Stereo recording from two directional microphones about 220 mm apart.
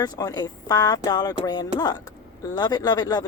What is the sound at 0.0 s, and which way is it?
Speech, 15° left (ahead or behind).